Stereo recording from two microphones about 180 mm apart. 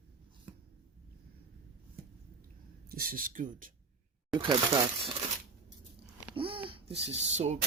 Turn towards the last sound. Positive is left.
turn(degrees=-40)  # may be behind; listen again after turning